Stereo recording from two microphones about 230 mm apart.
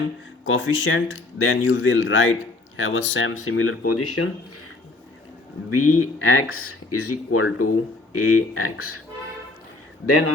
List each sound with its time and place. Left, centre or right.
0.4 s speech: left
5.7 s speech: left
10.1 s speech: left